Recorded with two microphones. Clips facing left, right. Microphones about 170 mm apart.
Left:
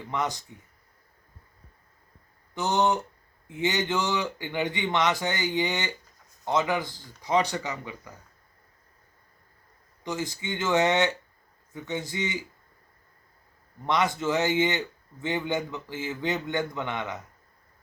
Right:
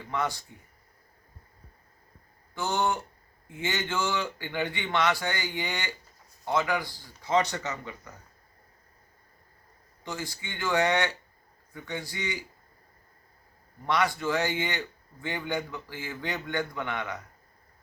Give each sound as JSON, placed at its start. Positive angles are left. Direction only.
{"t": 0.1, "sound": "speech", "side_deg": 20}
{"t": 2.6, "sound": "speech", "side_deg": 20}
{"t": 10.0, "sound": "speech", "side_deg": 20}
{"t": 13.8, "sound": "speech", "side_deg": 20}